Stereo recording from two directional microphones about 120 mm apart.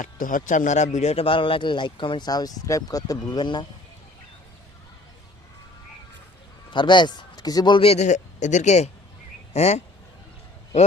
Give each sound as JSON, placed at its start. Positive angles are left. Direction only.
{"t": 0.0, "sound": "speech", "side_deg": 90}
{"t": 6.7, "sound": "speech", "side_deg": 40}
{"t": 7.8, "sound": "speech", "side_deg": 65}